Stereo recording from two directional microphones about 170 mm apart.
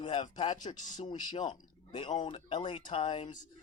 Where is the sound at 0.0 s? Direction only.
30° left (ahead or behind).